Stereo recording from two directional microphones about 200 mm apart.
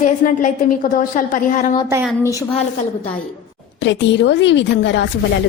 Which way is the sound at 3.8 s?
65° left (ahead or behind).